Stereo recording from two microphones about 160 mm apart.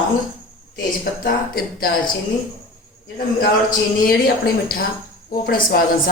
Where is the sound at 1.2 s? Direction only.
65° left (ahead or behind).